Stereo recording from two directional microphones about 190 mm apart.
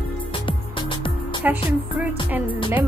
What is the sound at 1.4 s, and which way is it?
Speech, 10° right (ahead or behind).